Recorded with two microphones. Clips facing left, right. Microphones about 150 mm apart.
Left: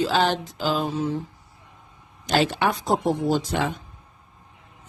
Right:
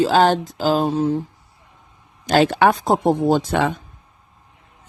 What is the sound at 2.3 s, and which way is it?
Speech, 50° right (ahead or behind).